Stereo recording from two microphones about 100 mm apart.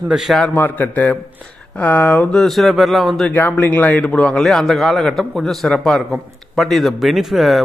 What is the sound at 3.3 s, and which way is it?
A man's voice, 20° left (ahead or behind).